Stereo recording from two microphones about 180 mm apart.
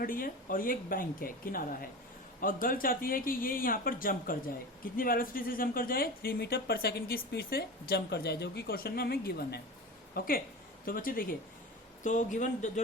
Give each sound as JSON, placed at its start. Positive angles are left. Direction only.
{"t": 0.0, "sound": "speech", "side_deg": 50}